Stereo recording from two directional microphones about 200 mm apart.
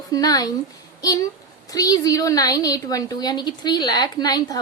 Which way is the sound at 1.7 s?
20° left (ahead or behind).